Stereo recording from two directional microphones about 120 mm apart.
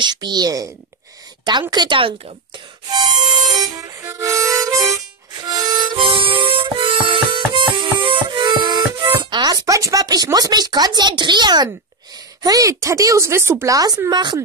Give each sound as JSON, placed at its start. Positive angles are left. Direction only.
{"t": 0.0, "sound": "speech", "side_deg": -35}
{"t": 3.5, "sound": "harmonica", "side_deg": -30}
{"t": 12.4, "sound": "speech", "side_deg": -30}